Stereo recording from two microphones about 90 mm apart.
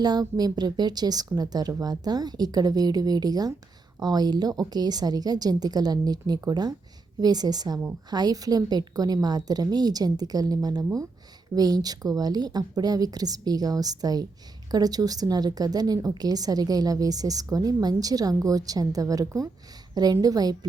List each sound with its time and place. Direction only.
0.0 s a woman's voice: 50° right (ahead or behind)